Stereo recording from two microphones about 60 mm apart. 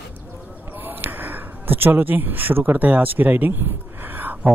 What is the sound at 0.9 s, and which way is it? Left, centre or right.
Speech, right.